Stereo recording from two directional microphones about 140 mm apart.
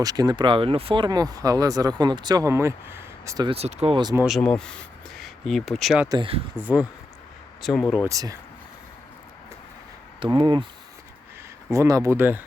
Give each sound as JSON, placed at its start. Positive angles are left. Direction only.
{"t": 0.0, "sound": "speech", "side_deg": -25}
{"t": 3.5, "sound": "speech", "side_deg": -50}
{"t": 4.3, "sound": "speech", "side_deg": 5}
{"t": 6.1, "sound": "speech", "side_deg": -40}
{"t": 6.6, "sound": "speech", "side_deg": -10}
{"t": 7.6, "sound": "speech", "side_deg": 0}
{"t": 8.0, "sound": "speech", "side_deg": -25}
{"t": 10.3, "sound": "speech", "side_deg": -35}
{"t": 11.7, "sound": "speech", "side_deg": -25}